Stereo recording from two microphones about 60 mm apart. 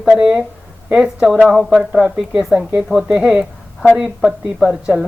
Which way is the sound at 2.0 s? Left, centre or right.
Right.